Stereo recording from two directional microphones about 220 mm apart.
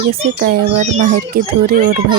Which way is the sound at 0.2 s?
40° right (ahead or behind).